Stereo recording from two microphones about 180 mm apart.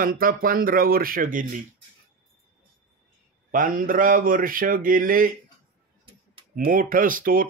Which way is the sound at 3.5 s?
50° right (ahead or behind).